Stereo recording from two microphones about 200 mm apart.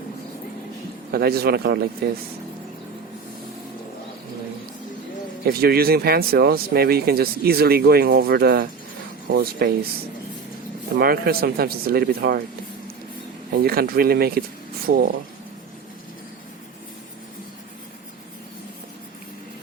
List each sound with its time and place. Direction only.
1.1 s speech: 50° right (ahead or behind)
5.5 s speech: 50° right (ahead or behind)
10.9 s speech: 50° right (ahead or behind)
13.5 s speech: 50° right (ahead or behind)